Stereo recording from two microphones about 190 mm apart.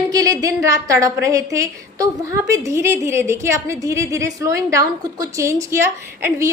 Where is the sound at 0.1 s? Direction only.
20° right (ahead or behind).